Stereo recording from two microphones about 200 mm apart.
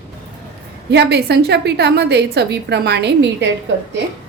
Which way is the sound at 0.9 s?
55° right (ahead or behind).